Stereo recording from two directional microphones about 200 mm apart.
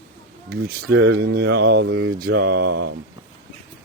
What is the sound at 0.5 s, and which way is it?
Mantra, 50° right (ahead or behind).